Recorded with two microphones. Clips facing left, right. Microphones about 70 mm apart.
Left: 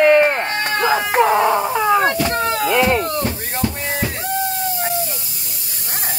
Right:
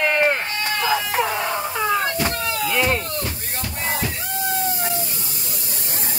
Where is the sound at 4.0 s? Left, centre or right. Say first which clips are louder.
Left 4 dB; left.